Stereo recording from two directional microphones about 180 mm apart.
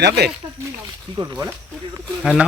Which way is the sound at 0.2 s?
65° right (ahead or behind).